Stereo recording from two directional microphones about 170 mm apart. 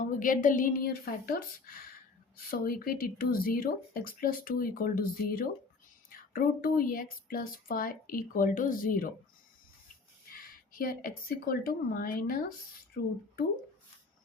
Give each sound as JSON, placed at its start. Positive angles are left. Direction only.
{"t": 0.2, "sound": "speech", "side_deg": 50}
{"t": 10.3, "sound": "speech", "side_deg": 55}